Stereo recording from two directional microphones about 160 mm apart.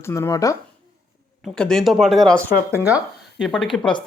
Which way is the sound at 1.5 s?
5° left (ahead or behind).